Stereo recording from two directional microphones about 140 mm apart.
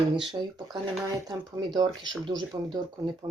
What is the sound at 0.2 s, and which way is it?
Speech, 30° right (ahead or behind).